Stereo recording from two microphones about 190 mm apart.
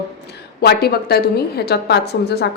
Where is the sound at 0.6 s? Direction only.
55° left (ahead or behind).